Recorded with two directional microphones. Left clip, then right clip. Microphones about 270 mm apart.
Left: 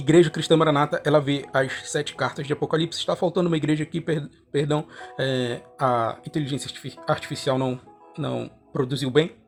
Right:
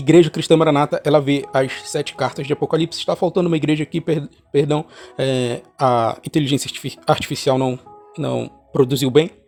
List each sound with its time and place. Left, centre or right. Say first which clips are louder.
0.0 s speech: right 5 dB; right